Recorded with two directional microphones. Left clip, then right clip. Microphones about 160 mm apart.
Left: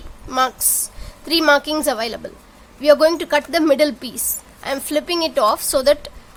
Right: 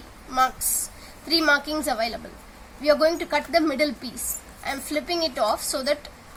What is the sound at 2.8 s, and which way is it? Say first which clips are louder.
A woman's voice: left 7 dB; 80° left.